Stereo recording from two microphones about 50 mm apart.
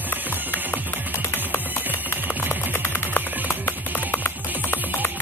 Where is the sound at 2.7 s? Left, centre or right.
Left.